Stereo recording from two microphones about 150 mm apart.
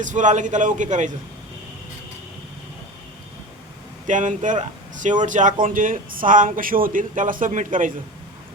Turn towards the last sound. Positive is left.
turn(degrees=-60)  # may be behind; listen again after turning